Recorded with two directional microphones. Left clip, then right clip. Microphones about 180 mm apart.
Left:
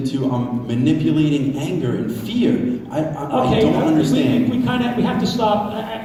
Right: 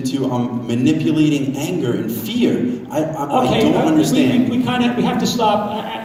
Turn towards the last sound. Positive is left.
turn(degrees=-50)  # may be behind; listen again after turning